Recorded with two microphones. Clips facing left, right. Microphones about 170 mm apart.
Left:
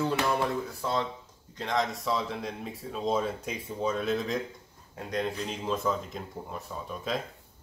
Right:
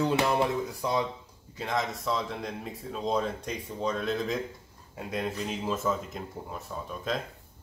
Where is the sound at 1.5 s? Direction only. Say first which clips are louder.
Left 1 dB; 5° right (ahead or behind).